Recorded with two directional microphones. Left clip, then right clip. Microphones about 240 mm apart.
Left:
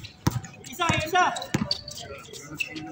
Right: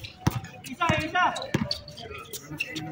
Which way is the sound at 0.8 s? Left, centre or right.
Left.